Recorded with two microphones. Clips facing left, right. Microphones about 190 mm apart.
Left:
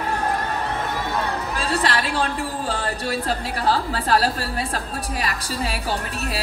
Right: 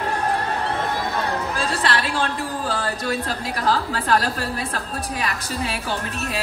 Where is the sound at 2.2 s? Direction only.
35° right (ahead or behind).